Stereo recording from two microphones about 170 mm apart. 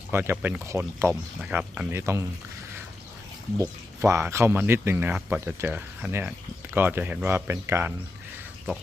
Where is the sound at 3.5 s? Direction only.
15° right (ahead or behind).